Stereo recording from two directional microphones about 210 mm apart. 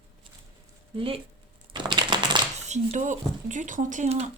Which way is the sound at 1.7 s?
20° right (ahead or behind).